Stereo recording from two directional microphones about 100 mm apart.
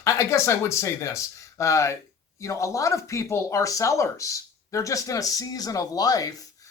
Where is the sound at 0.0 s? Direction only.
30° left (ahead or behind).